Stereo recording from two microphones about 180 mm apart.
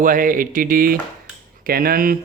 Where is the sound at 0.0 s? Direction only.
50° right (ahead or behind).